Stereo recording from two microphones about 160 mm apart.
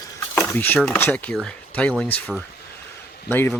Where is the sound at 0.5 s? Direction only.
10° left (ahead or behind).